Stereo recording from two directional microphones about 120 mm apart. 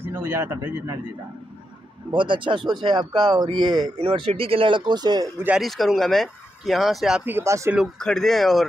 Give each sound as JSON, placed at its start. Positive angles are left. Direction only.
{"t": 0.0, "sound": "speech", "side_deg": -20}
{"t": 2.0, "sound": "speech", "side_deg": -45}
{"t": 4.0, "sound": "speech", "side_deg": -50}
{"t": 5.6, "sound": "speech", "side_deg": 0}
{"t": 7.2, "sound": "speech", "side_deg": -20}
{"t": 8.0, "sound": "speech", "side_deg": 5}